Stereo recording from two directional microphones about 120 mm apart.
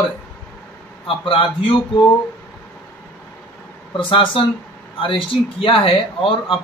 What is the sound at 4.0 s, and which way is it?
Speech, 45° left (ahead or behind).